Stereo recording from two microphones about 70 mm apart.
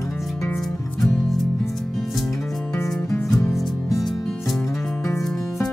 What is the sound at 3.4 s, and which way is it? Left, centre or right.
Music, left.